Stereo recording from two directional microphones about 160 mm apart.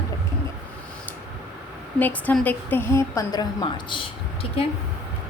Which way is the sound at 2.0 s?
10° left (ahead or behind).